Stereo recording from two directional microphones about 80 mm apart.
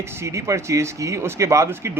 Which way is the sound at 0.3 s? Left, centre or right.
Right.